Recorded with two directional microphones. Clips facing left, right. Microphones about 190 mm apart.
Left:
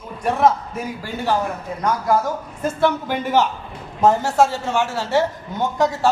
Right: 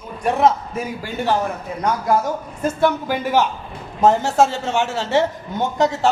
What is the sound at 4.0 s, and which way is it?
A man's voice, 20° right (ahead or behind).